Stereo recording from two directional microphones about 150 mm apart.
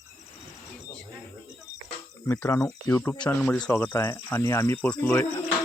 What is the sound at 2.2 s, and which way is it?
Speech, 20° left (ahead or behind).